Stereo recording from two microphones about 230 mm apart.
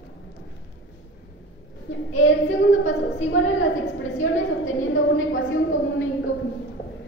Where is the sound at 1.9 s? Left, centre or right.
Left.